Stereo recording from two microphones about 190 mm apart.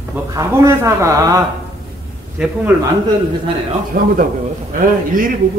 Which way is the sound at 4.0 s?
45° right (ahead or behind).